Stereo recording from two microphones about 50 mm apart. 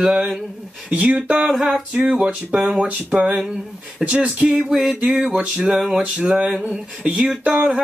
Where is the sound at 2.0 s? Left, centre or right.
Right.